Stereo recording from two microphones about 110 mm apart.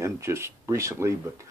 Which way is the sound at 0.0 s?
25° right (ahead or behind).